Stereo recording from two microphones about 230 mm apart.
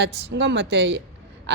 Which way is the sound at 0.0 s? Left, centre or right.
Right.